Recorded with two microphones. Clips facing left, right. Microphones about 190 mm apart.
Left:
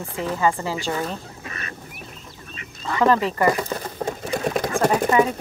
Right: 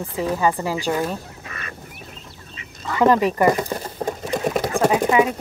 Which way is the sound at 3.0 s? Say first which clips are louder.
Right 3 dB; 15° right (ahead or behind).